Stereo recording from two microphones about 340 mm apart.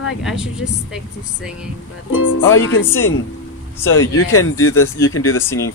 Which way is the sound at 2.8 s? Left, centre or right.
Centre.